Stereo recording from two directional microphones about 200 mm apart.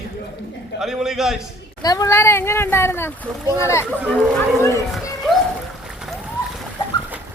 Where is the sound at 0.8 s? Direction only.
Centre (ahead or behind).